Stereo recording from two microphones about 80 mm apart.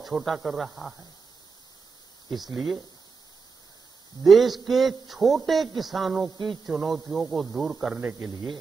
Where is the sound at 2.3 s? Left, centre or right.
Centre.